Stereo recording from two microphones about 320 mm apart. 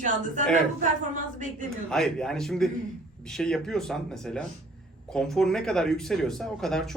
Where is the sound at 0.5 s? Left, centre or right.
Right.